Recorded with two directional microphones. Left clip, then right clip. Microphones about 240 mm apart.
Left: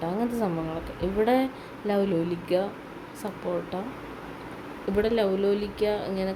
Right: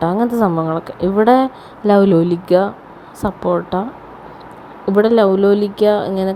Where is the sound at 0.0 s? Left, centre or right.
Right.